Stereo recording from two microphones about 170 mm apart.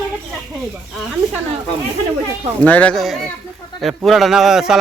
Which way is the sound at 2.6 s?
10° left (ahead or behind).